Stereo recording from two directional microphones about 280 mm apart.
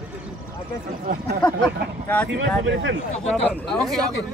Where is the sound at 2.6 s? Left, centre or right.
Right.